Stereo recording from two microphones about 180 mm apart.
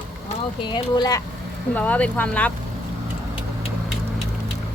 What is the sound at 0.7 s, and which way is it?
Speech, 25° left (ahead or behind).